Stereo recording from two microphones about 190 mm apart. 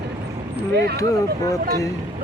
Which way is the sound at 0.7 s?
60° right (ahead or behind).